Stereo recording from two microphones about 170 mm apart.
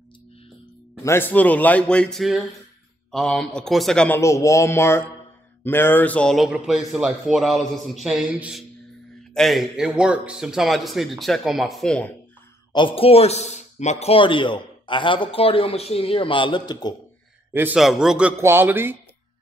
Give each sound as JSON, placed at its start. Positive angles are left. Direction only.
{"t": 1.0, "sound": "a man's voice", "side_deg": 15}
{"t": 4.2, "sound": "a man's voice", "side_deg": 15}
{"t": 12.7, "sound": "speech", "side_deg": 30}
{"t": 17.5, "sound": "a man's voice", "side_deg": -10}